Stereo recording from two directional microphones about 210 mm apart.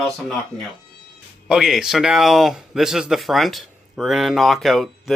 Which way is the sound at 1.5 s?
Centre (ahead or behind).